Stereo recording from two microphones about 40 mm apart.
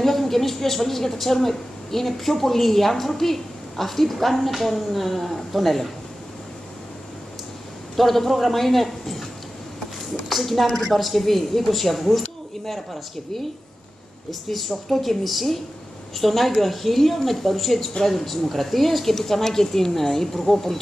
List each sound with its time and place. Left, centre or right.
0.0 s a woman's voice: centre
7.9 s a man's voice: centre
10.3 s a woman's voice: centre
14.9 s a woman's voice: centre